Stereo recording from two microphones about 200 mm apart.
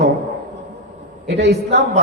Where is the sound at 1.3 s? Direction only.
55° right (ahead or behind).